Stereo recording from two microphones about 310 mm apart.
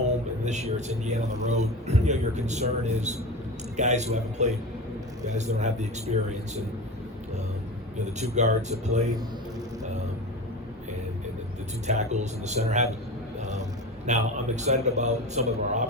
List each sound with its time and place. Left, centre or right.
0.4 s a man's voice: right
8.0 s a man's voice: right
11.9 s a man's voice: right
13.4 s a sound: right
14.1 s a man's voice: right